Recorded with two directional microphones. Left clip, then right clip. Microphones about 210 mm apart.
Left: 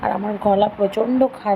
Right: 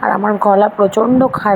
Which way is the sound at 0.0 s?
15° right (ahead or behind).